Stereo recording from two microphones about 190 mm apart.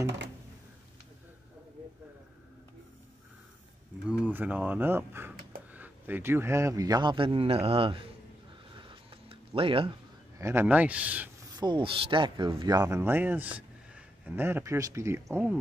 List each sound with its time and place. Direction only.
4.1 s a man's voice: 10° right (ahead or behind); by 8.1 s 30° right (ahead or behind)
8.7 s a sound: 25° right (ahead or behind)
10.4 s speech: 10° right (ahead or behind)
11.5 s speech: 25° right (ahead or behind)